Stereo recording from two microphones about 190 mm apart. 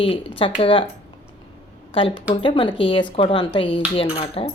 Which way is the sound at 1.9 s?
30° left (ahead or behind).